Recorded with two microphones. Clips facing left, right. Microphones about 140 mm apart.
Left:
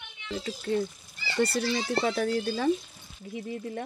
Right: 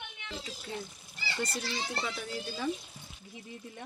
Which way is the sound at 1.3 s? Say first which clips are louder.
Left 10 dB; 70° left (ahead or behind).